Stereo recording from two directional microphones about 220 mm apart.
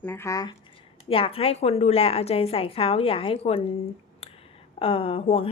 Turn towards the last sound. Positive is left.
turn(degrees=25)  # may be behind; listen again after turning